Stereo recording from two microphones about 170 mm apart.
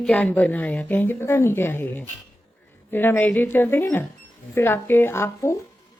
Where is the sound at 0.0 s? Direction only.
10° left (ahead or behind).